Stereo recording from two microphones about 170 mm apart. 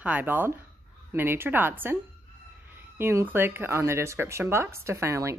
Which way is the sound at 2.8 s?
15° right (ahead or behind).